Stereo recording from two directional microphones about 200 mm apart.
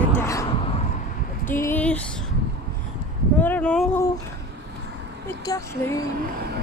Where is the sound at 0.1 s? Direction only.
15° left (ahead or behind).